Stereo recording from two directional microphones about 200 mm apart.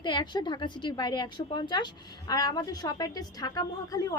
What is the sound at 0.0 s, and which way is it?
Speech, 20° left (ahead or behind).